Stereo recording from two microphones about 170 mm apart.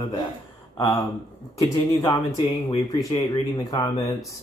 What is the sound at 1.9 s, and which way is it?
Speech, 25° left (ahead or behind).